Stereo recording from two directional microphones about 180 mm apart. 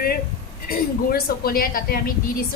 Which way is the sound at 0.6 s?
55° left (ahead or behind).